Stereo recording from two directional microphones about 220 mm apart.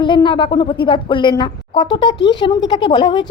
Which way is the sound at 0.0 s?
20° left (ahead or behind).